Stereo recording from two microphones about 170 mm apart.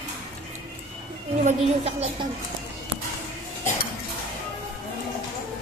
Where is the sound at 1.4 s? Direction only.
40° right (ahead or behind).